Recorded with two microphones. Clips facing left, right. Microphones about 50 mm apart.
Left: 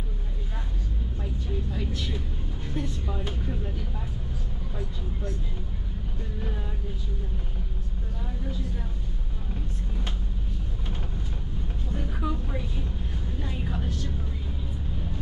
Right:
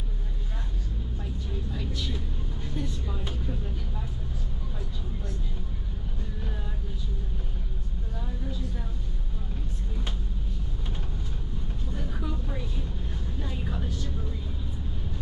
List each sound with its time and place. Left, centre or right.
1.7 s vehicle: centre
2.7 s speech: centre
12.0 s a sound: centre
13.4 s vehicle: centre